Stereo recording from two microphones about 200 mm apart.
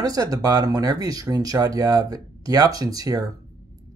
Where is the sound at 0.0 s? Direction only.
20° right (ahead or behind).